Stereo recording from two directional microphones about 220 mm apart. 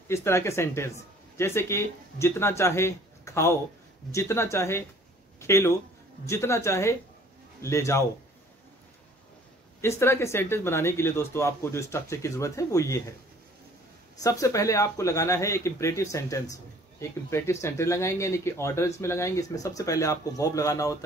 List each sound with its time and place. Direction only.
0.1 s speech: 10° left (ahead or behind)
9.8 s speech: 10° left (ahead or behind)
14.2 s speech: 15° left (ahead or behind)